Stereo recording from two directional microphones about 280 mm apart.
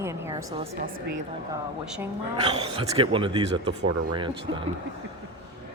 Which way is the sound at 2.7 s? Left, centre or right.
Centre.